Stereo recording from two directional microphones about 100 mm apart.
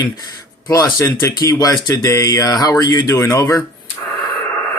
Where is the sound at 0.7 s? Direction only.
35° left (ahead or behind).